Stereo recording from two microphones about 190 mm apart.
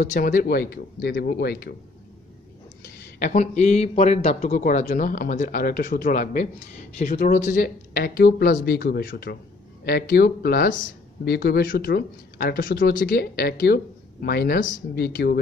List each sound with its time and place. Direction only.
0.0 s speech: 45° left (ahead or behind)
3.2 s speech: 40° left (ahead or behind); by 15.3 s 55° left (ahead or behind)